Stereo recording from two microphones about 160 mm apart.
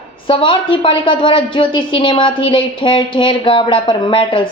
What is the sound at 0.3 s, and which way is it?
A woman's voice, 35° left (ahead or behind).